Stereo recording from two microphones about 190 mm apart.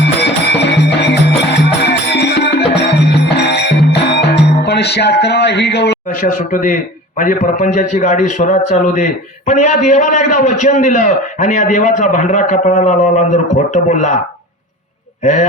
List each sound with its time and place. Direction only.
0.0 s music: 65° left (ahead or behind)
6.1 s a man's voice: 45° left (ahead or behind)
15.2 s speech: 40° left (ahead or behind)